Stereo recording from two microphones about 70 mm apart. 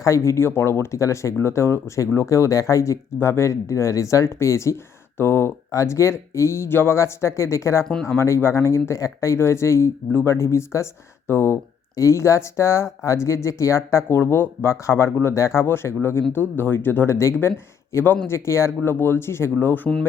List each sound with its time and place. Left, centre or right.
0.0 s speech: left
3.2 s speech: left
14.2 s speech: left
18.3 s speech: left
19.5 s speech: left